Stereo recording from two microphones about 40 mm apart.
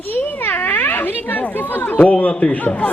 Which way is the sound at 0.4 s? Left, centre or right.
Left.